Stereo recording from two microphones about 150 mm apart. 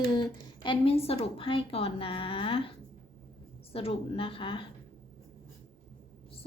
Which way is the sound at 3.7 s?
40° left (ahead or behind).